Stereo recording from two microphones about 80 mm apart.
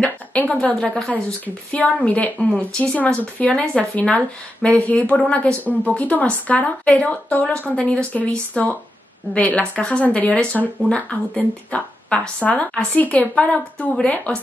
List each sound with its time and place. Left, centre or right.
0.0 s a woman's voice: centre